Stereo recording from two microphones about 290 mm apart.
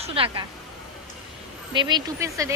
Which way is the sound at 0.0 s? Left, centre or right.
Centre.